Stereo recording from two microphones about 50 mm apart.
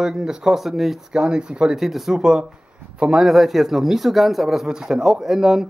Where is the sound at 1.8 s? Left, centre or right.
Centre.